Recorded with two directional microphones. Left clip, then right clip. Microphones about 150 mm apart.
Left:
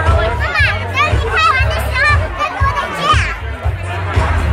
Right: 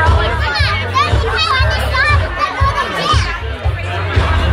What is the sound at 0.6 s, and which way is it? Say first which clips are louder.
Music: left 2 dB; 20° left (ahead or behind).